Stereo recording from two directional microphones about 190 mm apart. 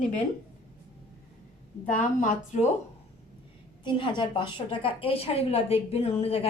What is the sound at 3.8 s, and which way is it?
A woman's voice, 25° left (ahead or behind).